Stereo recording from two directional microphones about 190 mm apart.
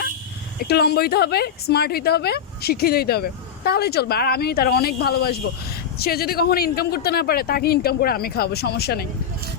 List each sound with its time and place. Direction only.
0.6 s speech: 55° left (ahead or behind)